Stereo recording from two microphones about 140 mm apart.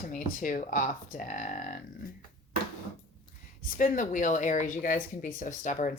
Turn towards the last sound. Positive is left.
turn(degrees=65)  # may be behind; listen again after turning